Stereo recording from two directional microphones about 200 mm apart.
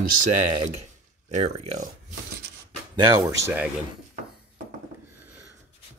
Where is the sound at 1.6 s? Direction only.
35° right (ahead or behind).